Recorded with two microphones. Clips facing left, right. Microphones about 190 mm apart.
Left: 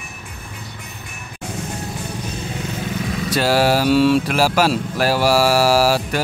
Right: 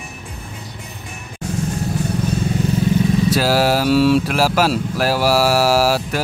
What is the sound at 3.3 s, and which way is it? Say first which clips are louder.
Speech: left 4 dB; centre (ahead or behind).